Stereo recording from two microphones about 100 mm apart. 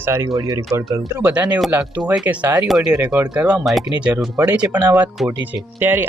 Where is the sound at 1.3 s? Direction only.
15° right (ahead or behind).